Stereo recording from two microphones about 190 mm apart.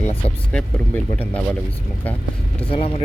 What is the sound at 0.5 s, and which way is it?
Speech, 5° left (ahead or behind).